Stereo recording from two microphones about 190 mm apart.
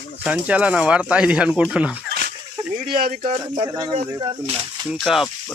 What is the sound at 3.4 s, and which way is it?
Speech, 20° right (ahead or behind).